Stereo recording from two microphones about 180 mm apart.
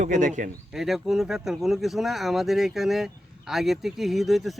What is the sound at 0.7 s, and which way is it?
Speech, centre (ahead or behind).